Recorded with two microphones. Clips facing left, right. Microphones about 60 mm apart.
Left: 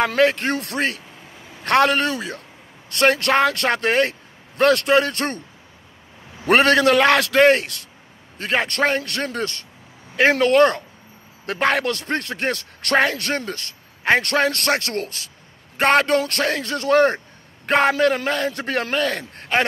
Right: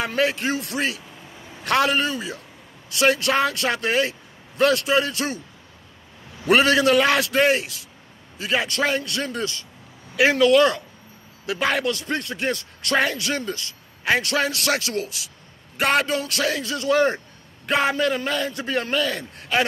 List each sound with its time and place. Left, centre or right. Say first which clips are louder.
0.0 s speech: left 5 dB; left
6.4 s a man's voice: left 2 dB; left